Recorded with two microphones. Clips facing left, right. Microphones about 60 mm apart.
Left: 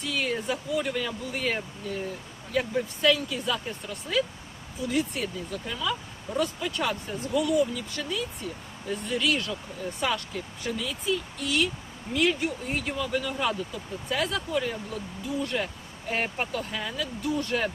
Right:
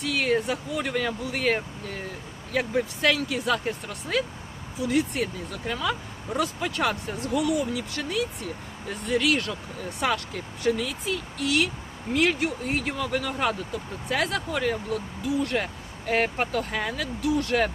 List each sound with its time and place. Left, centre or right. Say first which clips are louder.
0.0 s speech: right 5 dB; right
15.6 s speech: right 3 dB; right